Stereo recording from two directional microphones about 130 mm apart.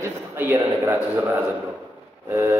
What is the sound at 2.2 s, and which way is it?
Speech, 20° right (ahead or behind).